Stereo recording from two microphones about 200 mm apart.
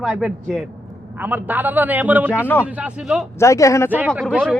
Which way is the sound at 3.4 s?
15° left (ahead or behind).